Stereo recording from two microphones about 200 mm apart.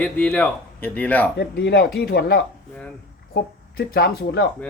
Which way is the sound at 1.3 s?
55° left (ahead or behind).